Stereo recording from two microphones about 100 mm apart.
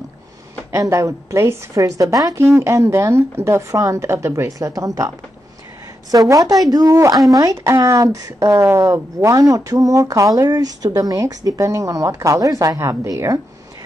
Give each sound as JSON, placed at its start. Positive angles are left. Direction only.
{"t": 0.7, "sound": "a woman's voice", "side_deg": -30}
{"t": 6.2, "sound": "speech", "side_deg": -35}